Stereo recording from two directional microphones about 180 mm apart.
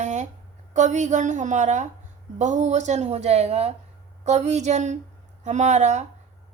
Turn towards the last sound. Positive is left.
turn(degrees=-40)  # may be behind; listen again after turning